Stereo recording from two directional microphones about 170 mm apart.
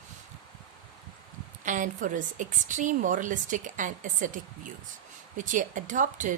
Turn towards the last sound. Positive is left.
turn(degrees=-50)  # may be behind; listen again after turning